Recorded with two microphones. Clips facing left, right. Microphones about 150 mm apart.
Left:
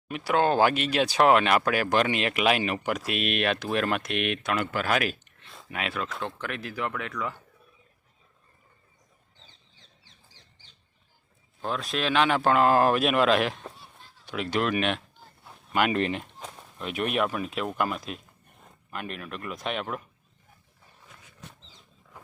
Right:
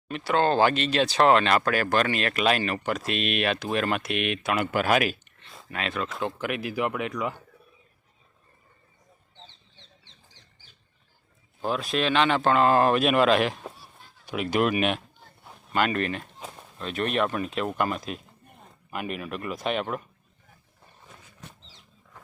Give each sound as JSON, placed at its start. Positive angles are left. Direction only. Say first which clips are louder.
{"t": 0.1, "sound": "speech", "louder": "even", "side_deg": 10}
{"t": 4.5, "sound": "speech", "louder": "right 5 dB", "side_deg": -15}
{"t": 11.6, "sound": "speech", "louder": "right 3 dB", "side_deg": -5}
{"t": 15.7, "sound": "speech", "louder": "left 1 dB", "side_deg": 15}
{"t": 16.7, "sound": "speech", "louder": "right 1 dB", "side_deg": 10}